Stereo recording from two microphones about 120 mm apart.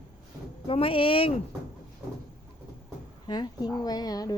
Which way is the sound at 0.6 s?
50° left (ahead or behind).